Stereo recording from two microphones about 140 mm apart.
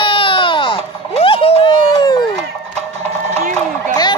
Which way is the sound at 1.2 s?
40° left (ahead or behind).